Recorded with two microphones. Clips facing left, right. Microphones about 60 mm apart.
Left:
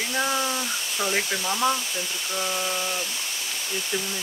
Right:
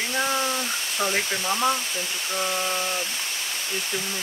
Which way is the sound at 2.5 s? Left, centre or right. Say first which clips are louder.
Right 1 dB; right.